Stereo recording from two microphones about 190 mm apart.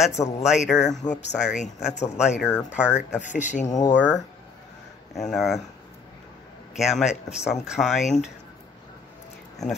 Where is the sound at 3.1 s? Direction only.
40° left (ahead or behind).